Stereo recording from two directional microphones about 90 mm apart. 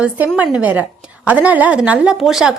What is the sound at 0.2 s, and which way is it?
A woman's voice, 20° right (ahead or behind).